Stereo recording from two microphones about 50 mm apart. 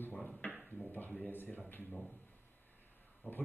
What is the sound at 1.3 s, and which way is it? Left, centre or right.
Speech, left.